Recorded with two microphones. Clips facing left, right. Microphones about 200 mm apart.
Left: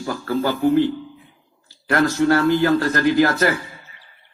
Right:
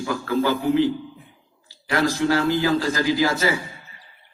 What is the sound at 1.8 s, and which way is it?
Speech, 55° left (ahead or behind).